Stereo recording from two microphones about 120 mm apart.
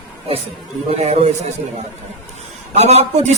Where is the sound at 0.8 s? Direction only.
65° right (ahead or behind).